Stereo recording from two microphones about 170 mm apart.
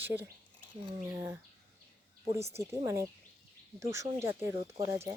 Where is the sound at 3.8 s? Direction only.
15° right (ahead or behind).